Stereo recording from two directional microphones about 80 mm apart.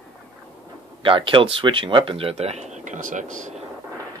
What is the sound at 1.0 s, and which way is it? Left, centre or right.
Speech, right.